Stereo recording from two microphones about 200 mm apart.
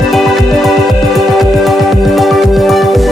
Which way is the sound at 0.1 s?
Centre (ahead or behind).